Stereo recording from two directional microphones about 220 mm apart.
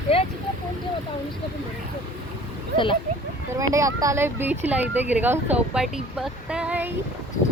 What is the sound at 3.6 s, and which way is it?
Speech, 15° right (ahead or behind).